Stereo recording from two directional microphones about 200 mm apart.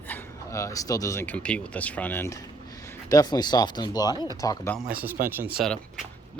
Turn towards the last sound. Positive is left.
turn(degrees=0)  # may be behind; listen again after turning